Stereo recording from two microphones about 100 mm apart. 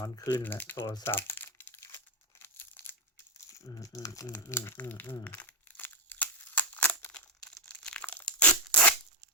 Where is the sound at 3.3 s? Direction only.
35° left (ahead or behind).